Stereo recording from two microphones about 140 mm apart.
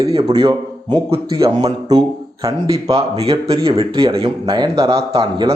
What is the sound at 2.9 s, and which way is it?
Speech, 45° right (ahead or behind).